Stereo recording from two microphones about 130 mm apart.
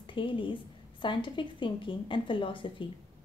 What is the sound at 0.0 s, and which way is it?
A woman's voice, 40° left (ahead or behind).